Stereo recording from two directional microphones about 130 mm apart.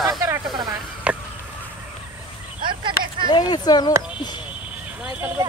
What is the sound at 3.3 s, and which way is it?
Speech, 30° left (ahead or behind).